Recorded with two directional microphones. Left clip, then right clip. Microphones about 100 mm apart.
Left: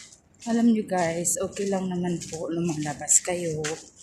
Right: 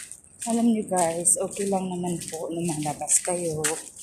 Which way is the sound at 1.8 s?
45° left (ahead or behind).